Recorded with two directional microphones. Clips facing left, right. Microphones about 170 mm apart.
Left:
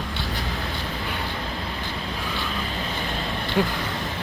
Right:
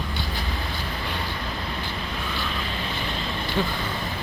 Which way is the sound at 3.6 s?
10° left (ahead or behind).